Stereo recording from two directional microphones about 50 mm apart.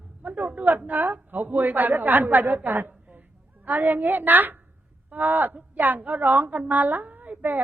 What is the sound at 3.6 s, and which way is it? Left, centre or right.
A woman's voice, right.